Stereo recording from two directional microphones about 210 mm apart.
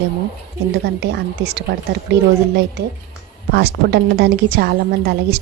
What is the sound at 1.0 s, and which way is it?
Speech, 55° right (ahead or behind).